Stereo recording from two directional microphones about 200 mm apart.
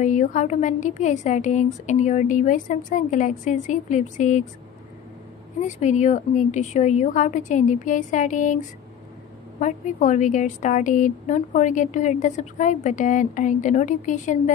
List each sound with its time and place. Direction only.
0.0 s a woman's voice: 40° left (ahead or behind)
5.6 s a woman's voice: 35° left (ahead or behind)